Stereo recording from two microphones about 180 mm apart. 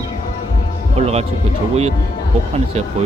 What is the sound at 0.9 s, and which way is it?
Speech, 35° right (ahead or behind).